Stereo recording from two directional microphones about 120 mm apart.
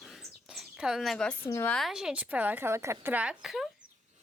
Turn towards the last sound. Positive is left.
turn(degrees=0)  # may be behind; listen again after turning